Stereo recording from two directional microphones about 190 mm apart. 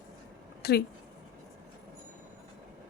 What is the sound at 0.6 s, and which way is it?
Speech, 55° left (ahead or behind).